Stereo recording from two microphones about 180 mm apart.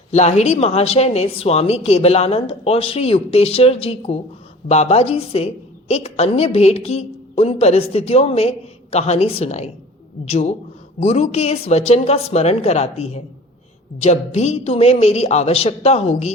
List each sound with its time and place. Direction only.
0.1 s speech: 40° left (ahead or behind)